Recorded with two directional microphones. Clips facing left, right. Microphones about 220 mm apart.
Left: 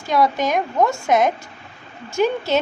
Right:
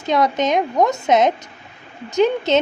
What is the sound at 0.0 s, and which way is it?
A woman's voice, 20° right (ahead or behind).